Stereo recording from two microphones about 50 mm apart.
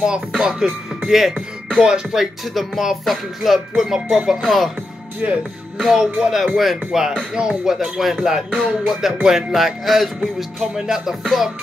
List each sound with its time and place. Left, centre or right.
0.0 s music: centre
1.8 s speech: centre
2.5 s speech: centre
4.3 s music: centre
5.2 s speech: right
5.8 s speech: centre
8.8 s music: centre
10.6 s speech: centre